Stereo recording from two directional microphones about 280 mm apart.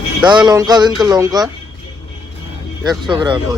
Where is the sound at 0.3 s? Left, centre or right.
Centre.